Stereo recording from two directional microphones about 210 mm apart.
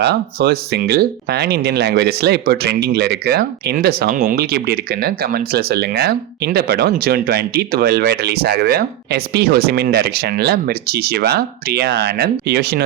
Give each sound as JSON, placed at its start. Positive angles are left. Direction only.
{"t": 0.0, "sound": "speech", "side_deg": -50}